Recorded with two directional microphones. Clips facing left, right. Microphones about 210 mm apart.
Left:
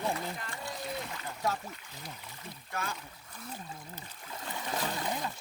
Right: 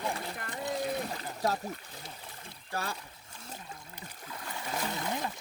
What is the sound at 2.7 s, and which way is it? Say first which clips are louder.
Speech: right 2 dB; 35° right (ahead or behind).